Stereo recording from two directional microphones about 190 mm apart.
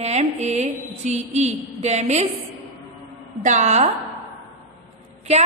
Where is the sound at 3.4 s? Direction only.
40° right (ahead or behind).